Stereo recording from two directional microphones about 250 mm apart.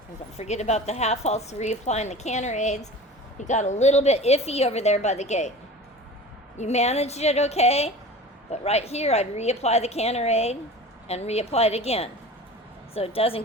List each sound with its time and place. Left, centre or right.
0.3 s a woman's voice: left
6.6 s a woman's voice: left